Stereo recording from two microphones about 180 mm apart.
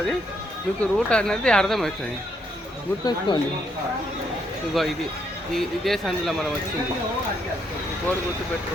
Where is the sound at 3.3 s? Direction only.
25° left (ahead or behind).